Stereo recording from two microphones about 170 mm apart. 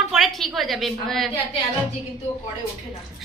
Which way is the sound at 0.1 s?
Centre (ahead or behind).